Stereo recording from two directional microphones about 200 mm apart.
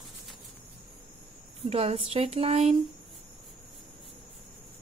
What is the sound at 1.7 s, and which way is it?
Speech, 30° right (ahead or behind).